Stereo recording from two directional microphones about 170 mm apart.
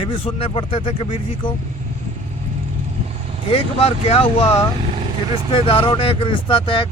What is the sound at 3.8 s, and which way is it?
Speech, 35° left (ahead or behind).